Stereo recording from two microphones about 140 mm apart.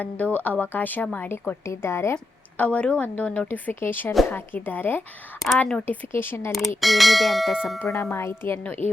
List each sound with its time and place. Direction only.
0.0 s a woman's voice: 10° left (ahead or behind)
6.8 s speech: centre (ahead or behind)
8.1 s a woman's voice: 20° left (ahead or behind)